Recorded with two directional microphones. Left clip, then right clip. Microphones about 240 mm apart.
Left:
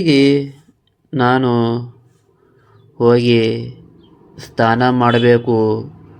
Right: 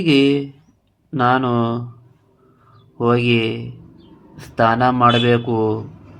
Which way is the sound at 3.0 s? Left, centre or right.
Centre.